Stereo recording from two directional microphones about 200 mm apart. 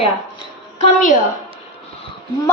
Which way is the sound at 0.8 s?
40° left (ahead or behind).